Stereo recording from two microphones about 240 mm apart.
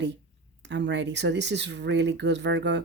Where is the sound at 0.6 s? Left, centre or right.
Right.